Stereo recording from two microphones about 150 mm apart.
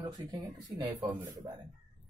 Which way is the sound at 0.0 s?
25° right (ahead or behind).